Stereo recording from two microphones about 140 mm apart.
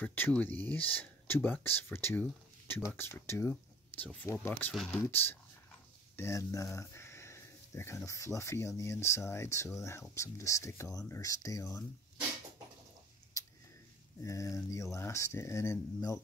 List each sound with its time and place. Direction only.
0.0 s speech: 15° left (ahead or behind)
4.7 s speech: centre (ahead or behind)
5.0 s speech: 15° left (ahead or behind)
14.2 s speech: 25° left (ahead or behind)